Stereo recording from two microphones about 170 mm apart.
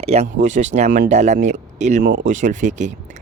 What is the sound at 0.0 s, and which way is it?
Speech, 40° right (ahead or behind).